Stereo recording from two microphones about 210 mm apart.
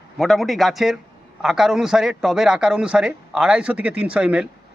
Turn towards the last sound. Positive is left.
turn(degrees=-5)  # may be behind; listen again after turning